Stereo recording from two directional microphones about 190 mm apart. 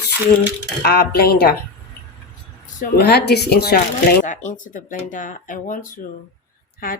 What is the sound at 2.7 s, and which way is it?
Speech, 50° left (ahead or behind).